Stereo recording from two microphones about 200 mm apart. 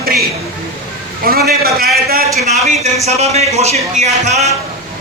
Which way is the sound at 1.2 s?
50° right (ahead or behind).